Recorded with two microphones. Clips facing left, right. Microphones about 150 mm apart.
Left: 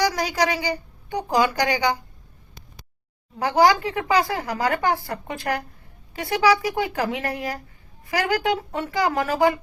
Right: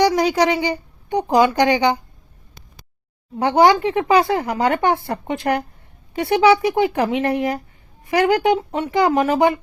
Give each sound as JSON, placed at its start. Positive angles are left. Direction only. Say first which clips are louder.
{"t": 0.0, "sound": "a woman's voice", "louder": "right 6 dB", "side_deg": -25}
{"t": 3.3, "sound": "speech", "louder": "right 4 dB", "side_deg": -25}